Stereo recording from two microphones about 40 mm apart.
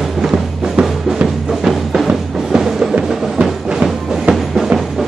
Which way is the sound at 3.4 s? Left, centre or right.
Centre.